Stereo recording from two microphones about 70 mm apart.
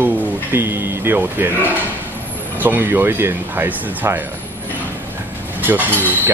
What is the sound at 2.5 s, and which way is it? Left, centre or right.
Speech, right.